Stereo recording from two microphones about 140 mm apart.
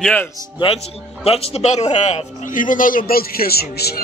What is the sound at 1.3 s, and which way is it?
A man's voice, 45° left (ahead or behind).